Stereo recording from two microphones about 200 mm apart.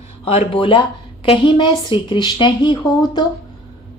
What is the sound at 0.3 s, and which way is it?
A woman's voice, 30° left (ahead or behind).